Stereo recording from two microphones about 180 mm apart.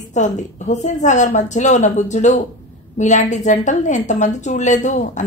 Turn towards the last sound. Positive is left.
turn(degrees=45)  # may be behind; listen again after turning